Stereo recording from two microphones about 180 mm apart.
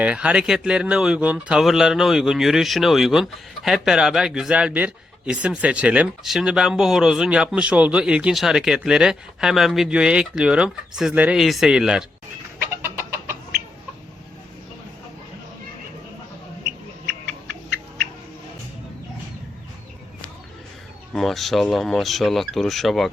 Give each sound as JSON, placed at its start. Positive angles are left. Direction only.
{"t": 0.0, "sound": "speech", "side_deg": -5}
{"t": 12.7, "sound": "chicken", "side_deg": -15}
{"t": 21.1, "sound": "speech", "side_deg": 0}